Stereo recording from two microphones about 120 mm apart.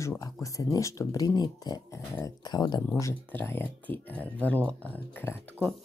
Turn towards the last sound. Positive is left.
turn(degrees=15)  # may be behind; listen again after turning